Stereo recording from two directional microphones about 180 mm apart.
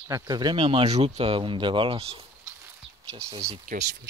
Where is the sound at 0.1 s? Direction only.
25° right (ahead or behind).